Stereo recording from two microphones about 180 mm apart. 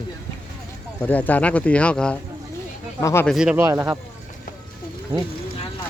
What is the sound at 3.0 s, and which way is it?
Speech, 15° left (ahead or behind).